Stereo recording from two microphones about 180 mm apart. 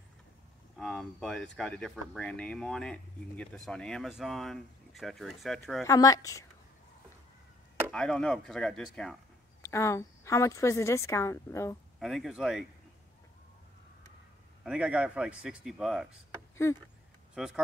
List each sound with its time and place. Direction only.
0.7 s speech: 5° left (ahead or behind)
5.9 s a woman's voice: 20° left (ahead or behind)
7.9 s speech: 5° left (ahead or behind)
9.6 s a woman's voice: 15° left (ahead or behind)
12.0 s speech: centre (ahead or behind)
14.6 s speech: 5° right (ahead or behind)
17.3 s speech: 5° right (ahead or behind)